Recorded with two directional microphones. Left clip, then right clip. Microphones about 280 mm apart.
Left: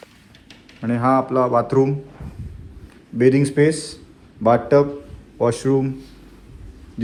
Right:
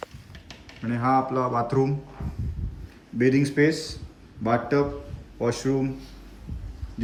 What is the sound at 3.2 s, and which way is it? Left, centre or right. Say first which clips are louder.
Speech: left 6 dB; centre.